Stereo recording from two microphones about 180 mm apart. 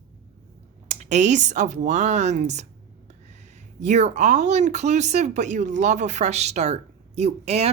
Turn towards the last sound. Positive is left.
turn(degrees=-35)  # may be behind; listen again after turning